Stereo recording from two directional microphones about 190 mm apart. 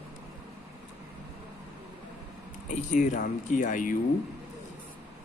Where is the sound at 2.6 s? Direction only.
40° left (ahead or behind).